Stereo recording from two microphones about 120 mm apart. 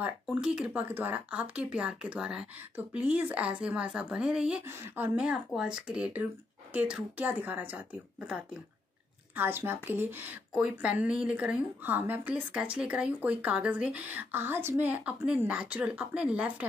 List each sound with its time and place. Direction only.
0.0 s a woman's voice: 10° right (ahead or behind)